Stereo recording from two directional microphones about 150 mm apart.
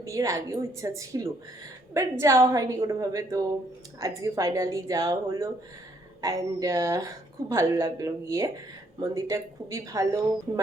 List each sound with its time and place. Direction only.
0.0 s a woman's voice: 20° right (ahead or behind)